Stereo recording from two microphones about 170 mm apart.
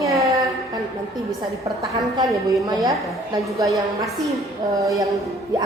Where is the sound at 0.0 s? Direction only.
20° right (ahead or behind).